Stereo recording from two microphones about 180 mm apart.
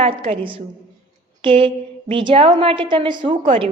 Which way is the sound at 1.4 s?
30° right (ahead or behind).